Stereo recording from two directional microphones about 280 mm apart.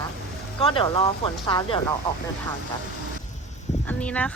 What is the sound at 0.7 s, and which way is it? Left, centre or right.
Speech, centre.